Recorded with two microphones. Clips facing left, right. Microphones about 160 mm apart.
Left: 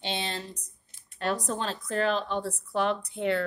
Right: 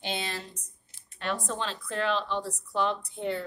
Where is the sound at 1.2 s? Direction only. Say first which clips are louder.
Left 3 dB; 40° left (ahead or behind).